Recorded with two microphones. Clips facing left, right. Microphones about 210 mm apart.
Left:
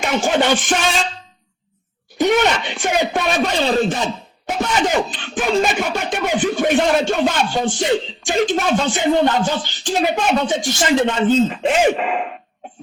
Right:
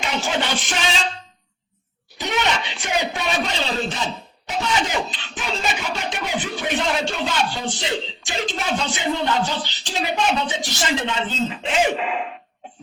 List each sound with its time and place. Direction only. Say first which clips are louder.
0.0 s speech: left 7 dB; 50° left (ahead or behind)
2.1 s speech: left 8 dB; 50° left (ahead or behind)